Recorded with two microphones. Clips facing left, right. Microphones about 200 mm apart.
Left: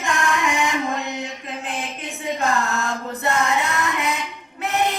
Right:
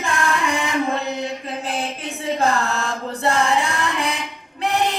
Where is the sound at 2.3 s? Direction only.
35° right (ahead or behind).